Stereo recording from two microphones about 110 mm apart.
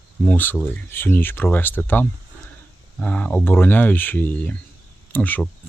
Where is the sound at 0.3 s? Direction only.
15° left (ahead or behind).